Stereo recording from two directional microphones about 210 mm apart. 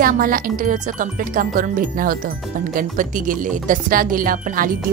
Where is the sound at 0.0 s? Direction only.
40° right (ahead or behind).